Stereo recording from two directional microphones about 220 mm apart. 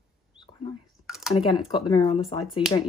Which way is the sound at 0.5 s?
30° left (ahead or behind).